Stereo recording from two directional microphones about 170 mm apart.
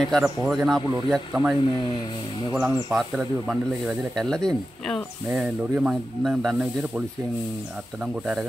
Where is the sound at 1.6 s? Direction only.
30° left (ahead or behind).